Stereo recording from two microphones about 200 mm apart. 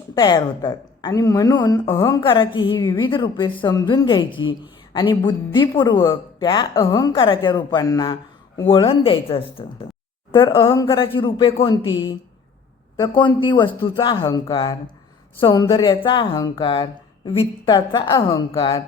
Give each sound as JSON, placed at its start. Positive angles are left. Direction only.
{"t": 0.1, "sound": "speech", "side_deg": 20}
{"t": 13.4, "sound": "speech", "side_deg": 25}